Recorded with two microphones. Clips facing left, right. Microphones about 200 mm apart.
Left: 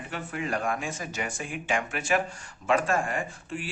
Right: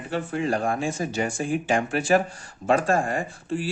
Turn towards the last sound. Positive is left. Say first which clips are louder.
# right 7 dB
turn(degrees=-35)  # may be behind; listen again after turning